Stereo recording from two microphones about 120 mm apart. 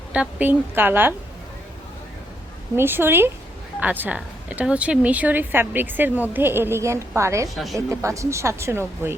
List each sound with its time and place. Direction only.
0.1 s speech: 10° right (ahead or behind)
2.7 s speech: 20° right (ahead or behind)
7.5 s a woman's voice: centre (ahead or behind)
7.8 s speech: 25° right (ahead or behind)